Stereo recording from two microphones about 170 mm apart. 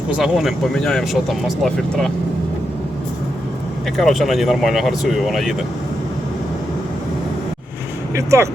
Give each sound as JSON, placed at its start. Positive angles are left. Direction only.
{"t": 0.1, "sound": "speech", "side_deg": 0}
{"t": 3.9, "sound": "speech", "side_deg": 0}
{"t": 8.1, "sound": "speech", "side_deg": -15}